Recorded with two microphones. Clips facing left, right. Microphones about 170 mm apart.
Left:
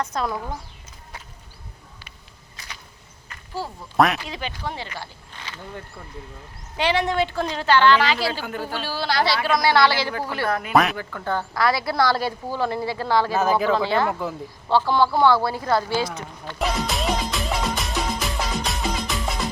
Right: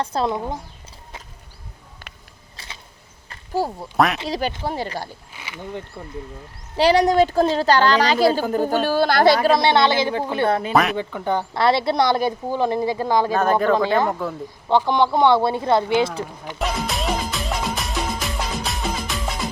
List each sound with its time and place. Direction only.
0.0 s speech: 30° right (ahead or behind)
2.0 s a sound: 50° right (ahead or behind)
2.6 s a sound: 30° right (ahead or behind)
3.9 s speech: centre (ahead or behind)
4.3 s a woman's voice: 40° right (ahead or behind)
5.3 s a sound: 10° right (ahead or behind)
6.7 s a woman's voice: 40° right (ahead or behind)
9.5 s speech: 25° right (ahead or behind)
10.9 s a woman's voice: 20° right (ahead or behind)
13.3 s speech: 5° left (ahead or behind)
13.7 s a woman's voice: 15° right (ahead or behind)
14.1 s speech: centre (ahead or behind)
14.7 s speech: 20° right (ahead or behind)
16.6 s music: centre (ahead or behind)